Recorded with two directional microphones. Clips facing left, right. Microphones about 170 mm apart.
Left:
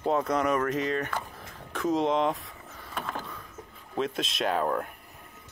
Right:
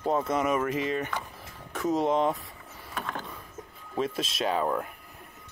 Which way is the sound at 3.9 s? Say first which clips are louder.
Even; centre (ahead or behind).